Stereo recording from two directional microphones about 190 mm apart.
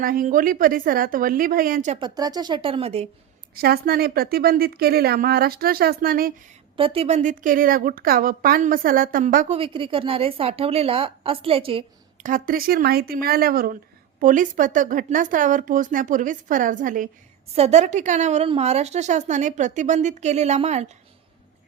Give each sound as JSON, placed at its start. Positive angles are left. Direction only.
{"t": 0.0, "sound": "speech", "side_deg": -50}
{"t": 2.0, "sound": "a woman's voice", "side_deg": -20}
{"t": 3.5, "sound": "speech", "side_deg": -55}
{"t": 6.7, "sound": "speech", "side_deg": -30}
{"t": 9.6, "sound": "a woman's voice", "side_deg": -30}
{"t": 12.2, "sound": "a woman's voice", "side_deg": -45}